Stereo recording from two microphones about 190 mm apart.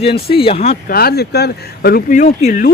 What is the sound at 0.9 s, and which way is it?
Speech, 55° left (ahead or behind).